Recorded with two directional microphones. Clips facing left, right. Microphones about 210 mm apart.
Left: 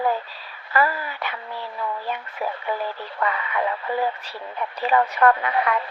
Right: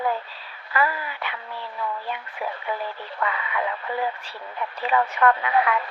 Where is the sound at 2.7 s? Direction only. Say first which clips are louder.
Left 2 dB; 35° left (ahead or behind).